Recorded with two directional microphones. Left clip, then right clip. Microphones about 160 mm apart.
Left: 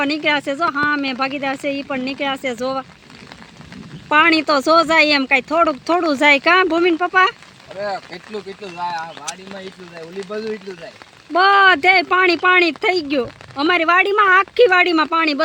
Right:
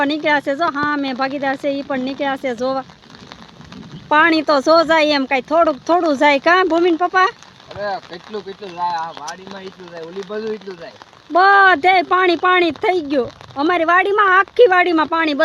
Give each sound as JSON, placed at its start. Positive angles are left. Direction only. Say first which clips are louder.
{"t": 0.0, "sound": "speech", "louder": "right 2 dB", "side_deg": 0}
{"t": 4.1, "sound": "speech", "louder": "even", "side_deg": 5}
{"t": 7.8, "sound": "speech", "louder": "right 1 dB", "side_deg": 15}
{"t": 11.3, "sound": "speech", "louder": "right 1 dB", "side_deg": 0}